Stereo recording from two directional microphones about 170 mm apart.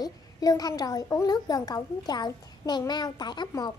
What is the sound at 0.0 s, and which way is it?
Speech, 20° left (ahead or behind).